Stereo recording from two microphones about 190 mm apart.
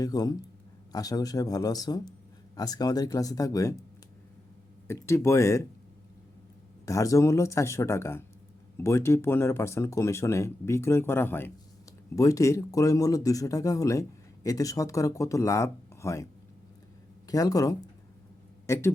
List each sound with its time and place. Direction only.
0.0 s speech: 20° left (ahead or behind)
4.9 s speech: 15° left (ahead or behind)
6.8 s speech: 15° left (ahead or behind)